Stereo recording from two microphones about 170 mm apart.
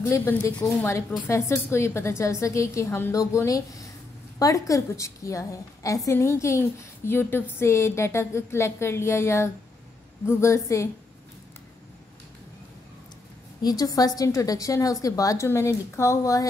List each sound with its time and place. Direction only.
0.0 s a woman's voice: 15° left (ahead or behind)
13.6 s a woman's voice: 20° left (ahead or behind)